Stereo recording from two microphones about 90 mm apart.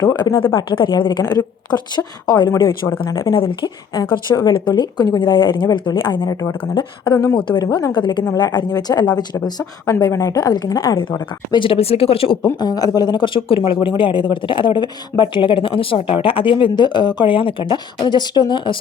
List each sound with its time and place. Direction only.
0.2 s a woman's voice: 55° left (ahead or behind)
3.3 s speech: 80° left
4.3 s a woman's voice: 35° left (ahead or behind)
4.7 s a woman's voice: 50° left (ahead or behind)
5.2 s a woman's voice: 60° left (ahead or behind)
6.2 s a woman's voice: 40° left (ahead or behind)
6.6 s a woman's voice: 65° left (ahead or behind); by 10.9 s 45° left (ahead or behind)
11.5 s speech: 80° left
12.5 s a woman's voice: 45° left (ahead or behind); by 13.7 s 80° left
13.8 s speech: 70° left (ahead or behind)
18.0 s a woman's voice: 55° left (ahead or behind)